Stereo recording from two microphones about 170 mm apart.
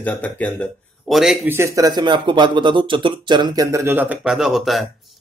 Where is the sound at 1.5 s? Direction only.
15° right (ahead or behind).